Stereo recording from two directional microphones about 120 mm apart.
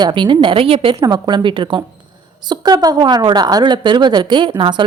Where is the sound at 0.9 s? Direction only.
35° right (ahead or behind).